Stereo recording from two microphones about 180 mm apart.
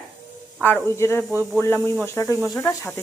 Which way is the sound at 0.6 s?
10° left (ahead or behind).